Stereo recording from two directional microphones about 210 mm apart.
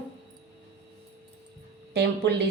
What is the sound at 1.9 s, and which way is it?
Speech, 55° right (ahead or behind).